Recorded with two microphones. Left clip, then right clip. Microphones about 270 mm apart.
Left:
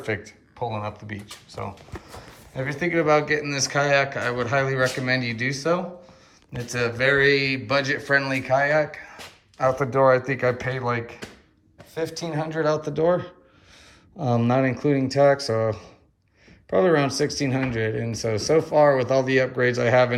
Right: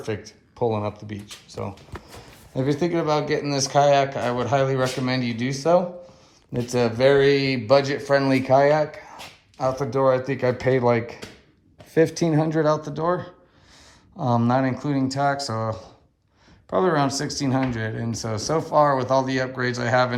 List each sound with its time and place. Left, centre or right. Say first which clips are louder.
0.3 s speech: right 6 dB; centre